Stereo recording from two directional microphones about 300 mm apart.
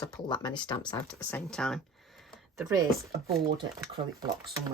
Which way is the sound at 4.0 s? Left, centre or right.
Right.